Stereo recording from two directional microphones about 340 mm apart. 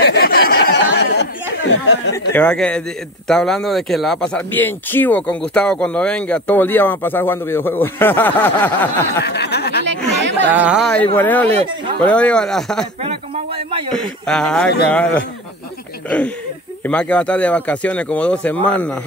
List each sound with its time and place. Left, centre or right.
0.0 s chatter: left
2.1 s speech: centre
9.2 s snicker: left
9.8 s chatter: right
10.5 s speech: centre
13.0 s a sound: centre
13.9 s speech: centre
16.8 s speech: centre